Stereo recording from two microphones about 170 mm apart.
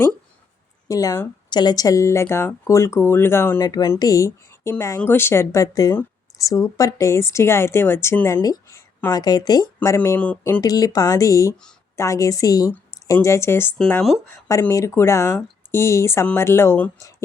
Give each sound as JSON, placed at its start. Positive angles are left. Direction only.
{"t": 0.9, "sound": "speech", "side_deg": 20}
{"t": 10.6, "sound": "a woman's voice", "side_deg": 20}
{"t": 14.4, "sound": "speech", "side_deg": 20}